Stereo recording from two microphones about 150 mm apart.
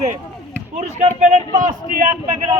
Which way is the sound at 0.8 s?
45° right (ahead or behind).